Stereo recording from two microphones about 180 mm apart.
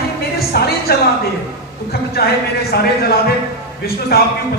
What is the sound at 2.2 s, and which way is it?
Speech, 60° left (ahead or behind).